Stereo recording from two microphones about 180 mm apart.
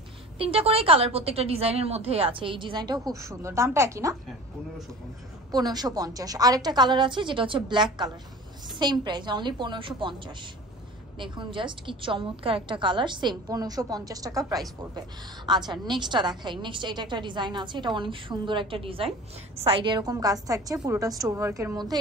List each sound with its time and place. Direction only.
0.4 s a woman's voice: 30° right (ahead or behind)
5.5 s a woman's voice: 20° right (ahead or behind)